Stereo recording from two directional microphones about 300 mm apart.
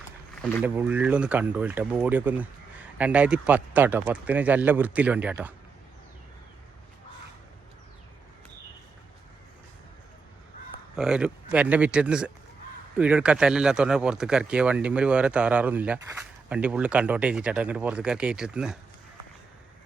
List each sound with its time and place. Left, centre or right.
0.6 s speech: centre
10.9 s speech: centre